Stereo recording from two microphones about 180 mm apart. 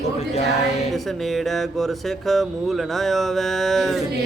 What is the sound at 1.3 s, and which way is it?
Music, centre (ahead or behind).